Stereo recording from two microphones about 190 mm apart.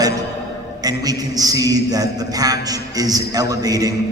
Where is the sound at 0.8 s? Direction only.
20° right (ahead or behind).